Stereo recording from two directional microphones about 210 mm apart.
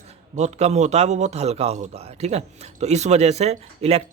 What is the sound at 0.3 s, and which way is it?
Speech, 30° right (ahead or behind).